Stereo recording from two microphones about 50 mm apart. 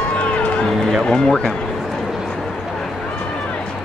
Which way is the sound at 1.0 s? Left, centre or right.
Centre.